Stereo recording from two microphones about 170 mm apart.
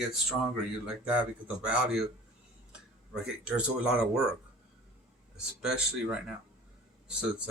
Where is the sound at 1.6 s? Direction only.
5° right (ahead or behind).